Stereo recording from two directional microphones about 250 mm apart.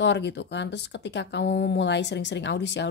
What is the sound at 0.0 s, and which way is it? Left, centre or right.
Speech, left.